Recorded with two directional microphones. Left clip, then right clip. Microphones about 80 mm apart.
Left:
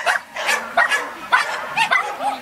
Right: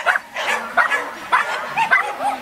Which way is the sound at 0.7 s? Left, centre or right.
Left.